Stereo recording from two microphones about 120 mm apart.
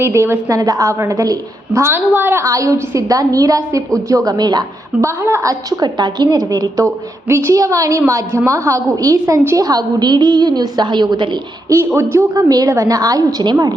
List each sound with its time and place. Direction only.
0.0 s a woman's voice: 20° right (ahead or behind)
9.6 s a woman's voice: 35° right (ahead or behind)
11.9 s a woman's voice: 25° right (ahead or behind)